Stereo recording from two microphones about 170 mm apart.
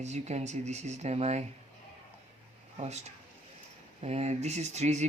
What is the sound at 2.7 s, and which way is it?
Speech, 40° right (ahead or behind).